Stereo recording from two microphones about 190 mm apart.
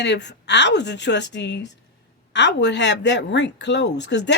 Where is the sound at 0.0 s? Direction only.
65° left (ahead or behind).